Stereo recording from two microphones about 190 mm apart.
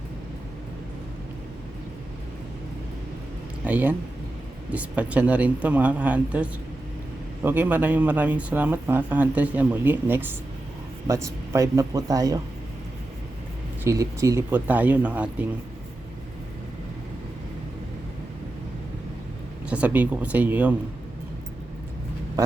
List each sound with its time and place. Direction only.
3.6 s speech: 10° right (ahead or behind)
13.8 s speech: 15° right (ahead or behind)
19.7 s speech: 10° right (ahead or behind)